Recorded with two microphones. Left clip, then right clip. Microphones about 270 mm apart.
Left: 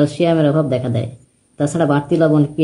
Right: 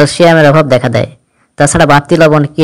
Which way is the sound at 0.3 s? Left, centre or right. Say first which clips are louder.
Right 10 dB; right.